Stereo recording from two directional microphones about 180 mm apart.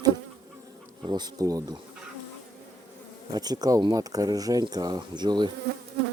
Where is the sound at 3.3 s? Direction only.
20° right (ahead or behind).